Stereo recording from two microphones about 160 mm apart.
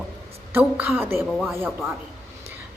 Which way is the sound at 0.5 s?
10° right (ahead or behind).